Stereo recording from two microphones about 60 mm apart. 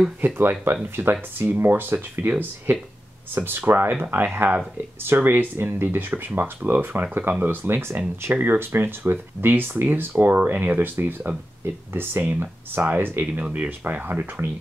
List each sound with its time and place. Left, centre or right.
0.2 s speech: right